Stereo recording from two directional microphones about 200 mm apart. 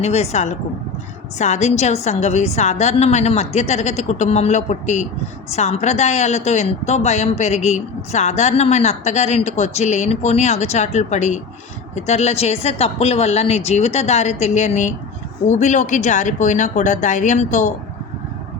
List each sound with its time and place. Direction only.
0.0 s speech: 35° left (ahead or behind)